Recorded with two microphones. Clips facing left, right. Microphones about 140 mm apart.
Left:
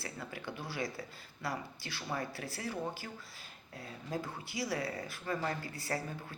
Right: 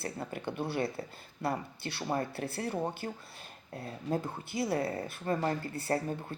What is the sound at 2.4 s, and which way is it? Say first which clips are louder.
Speech: right 5 dB; 55° right (ahead or behind).